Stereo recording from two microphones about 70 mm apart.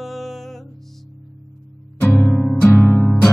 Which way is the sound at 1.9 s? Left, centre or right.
Left.